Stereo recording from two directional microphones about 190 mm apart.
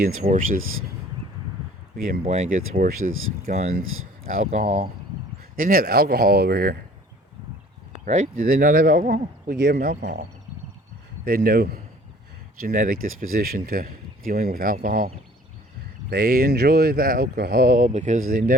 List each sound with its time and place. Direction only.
0.3 s speech: 45° right (ahead or behind)
0.6 s speech: 90° right
2.2 s speech: 35° right (ahead or behind)
3.0 s speech: 90° right
3.4 s speech: 35° right (ahead or behind); by 6.7 s 50° right (ahead or behind)
8.0 s speech: 45° right (ahead or behind)
9.0 s speech: 45° right (ahead or behind)
9.6 s speech: 55° right (ahead or behind)
11.3 s speech: 50° right (ahead or behind)